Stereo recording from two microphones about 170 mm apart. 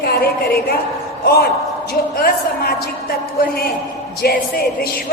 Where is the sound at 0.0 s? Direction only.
65° left (ahead or behind).